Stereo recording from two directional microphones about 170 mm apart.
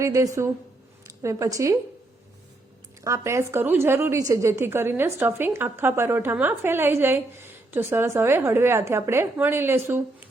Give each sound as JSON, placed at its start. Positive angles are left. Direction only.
{"t": 0.0, "sound": "a woman's voice", "side_deg": -20}
{"t": 3.0, "sound": "a woman's voice", "side_deg": -15}